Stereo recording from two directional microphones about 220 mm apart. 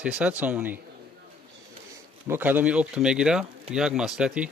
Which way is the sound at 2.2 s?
10° right (ahead or behind).